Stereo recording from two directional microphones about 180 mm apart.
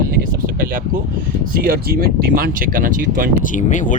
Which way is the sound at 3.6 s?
45° left (ahead or behind).